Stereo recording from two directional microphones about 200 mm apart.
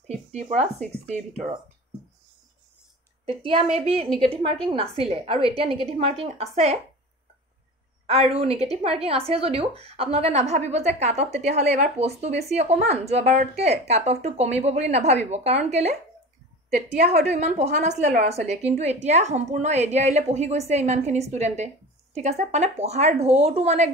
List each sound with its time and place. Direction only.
0.3 s speech: 35° right (ahead or behind)
3.3 s a woman's voice: 25° right (ahead or behind)
8.1 s a woman's voice: 30° right (ahead or behind)
17.3 s speech: 35° right (ahead or behind)